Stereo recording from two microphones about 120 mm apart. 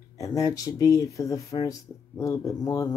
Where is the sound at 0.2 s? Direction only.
30° left (ahead or behind).